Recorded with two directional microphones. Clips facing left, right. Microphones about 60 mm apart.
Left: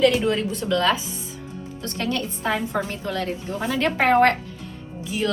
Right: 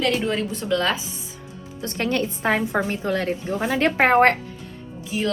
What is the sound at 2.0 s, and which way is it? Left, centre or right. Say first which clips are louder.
Speech: right 3 dB; right.